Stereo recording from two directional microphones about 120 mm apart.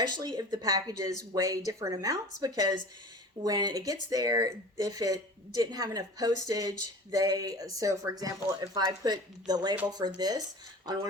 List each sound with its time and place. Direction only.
0.2 s speech: 35° right (ahead or behind)